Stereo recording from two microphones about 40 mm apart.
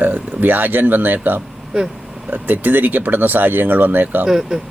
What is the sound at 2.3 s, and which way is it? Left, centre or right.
Speech, right.